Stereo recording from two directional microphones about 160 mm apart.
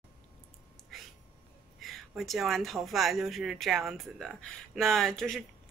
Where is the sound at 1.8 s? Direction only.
Centre (ahead or behind).